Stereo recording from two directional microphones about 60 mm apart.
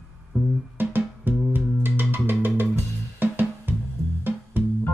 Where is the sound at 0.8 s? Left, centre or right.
Right.